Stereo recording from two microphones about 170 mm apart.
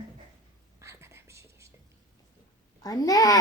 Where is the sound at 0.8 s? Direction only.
15° right (ahead or behind).